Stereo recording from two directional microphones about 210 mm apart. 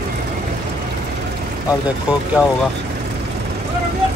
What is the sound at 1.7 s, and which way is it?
Speech, 5° right (ahead or behind).